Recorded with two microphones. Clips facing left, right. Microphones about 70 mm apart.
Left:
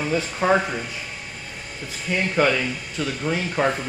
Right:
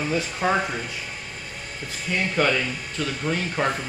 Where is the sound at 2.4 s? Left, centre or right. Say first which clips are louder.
Left 3 dB; centre.